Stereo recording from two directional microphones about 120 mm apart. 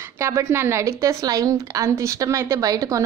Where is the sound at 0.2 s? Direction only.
25° right (ahead or behind).